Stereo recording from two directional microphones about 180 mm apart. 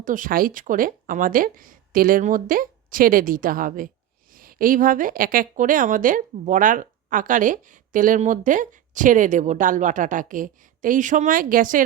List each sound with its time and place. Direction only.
0.0 s a woman's voice: 50° right (ahead or behind)